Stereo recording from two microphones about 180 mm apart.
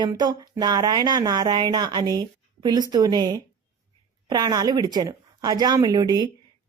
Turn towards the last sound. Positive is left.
turn(degrees=-25)  # may be behind; listen again after turning